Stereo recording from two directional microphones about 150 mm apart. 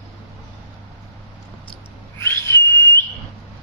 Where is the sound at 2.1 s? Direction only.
15° left (ahead or behind).